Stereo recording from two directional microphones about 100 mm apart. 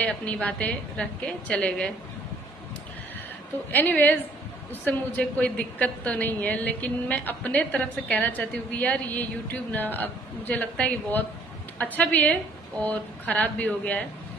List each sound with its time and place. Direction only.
0.0 s a woman's voice: 15° left (ahead or behind)
3.7 s a woman's voice: 20° left (ahead or behind)